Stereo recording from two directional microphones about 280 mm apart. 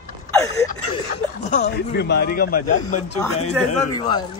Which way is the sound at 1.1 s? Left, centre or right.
Left.